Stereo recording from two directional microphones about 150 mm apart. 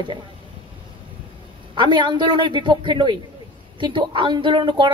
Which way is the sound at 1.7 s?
30° right (ahead or behind).